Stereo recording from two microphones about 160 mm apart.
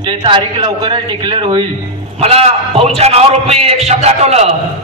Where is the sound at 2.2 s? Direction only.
40° right (ahead or behind).